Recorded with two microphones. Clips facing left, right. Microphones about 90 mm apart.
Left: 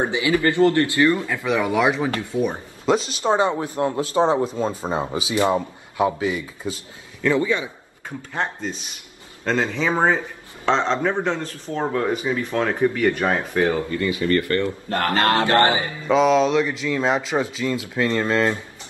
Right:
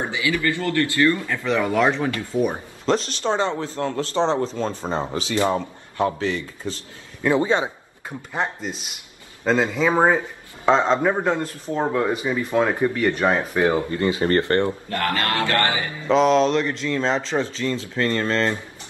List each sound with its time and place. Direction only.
0.0 s a man's voice: 20° left (ahead or behind)
1.4 s speech: 5° left (ahead or behind)
2.3 s speech: 25° right (ahead or behind)
2.8 s speech: 10° left (ahead or behind)
7.2 s speech: 20° right (ahead or behind)
8.3 s a man's voice: 5° right (ahead or behind)
13.3 s speech: 15° right (ahead or behind)
14.9 s a man's voice: 30° left (ahead or behind)
16.1 s speech: centre (ahead or behind)